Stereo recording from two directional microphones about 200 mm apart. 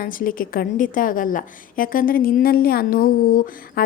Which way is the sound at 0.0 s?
45° left (ahead or behind).